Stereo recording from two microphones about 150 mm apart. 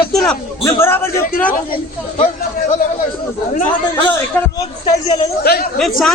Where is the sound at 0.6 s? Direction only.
20° left (ahead or behind).